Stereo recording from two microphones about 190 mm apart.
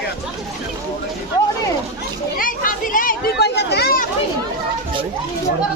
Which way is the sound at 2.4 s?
45° left (ahead or behind).